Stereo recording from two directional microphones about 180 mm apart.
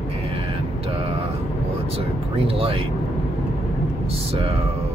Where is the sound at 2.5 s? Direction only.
30° right (ahead or behind).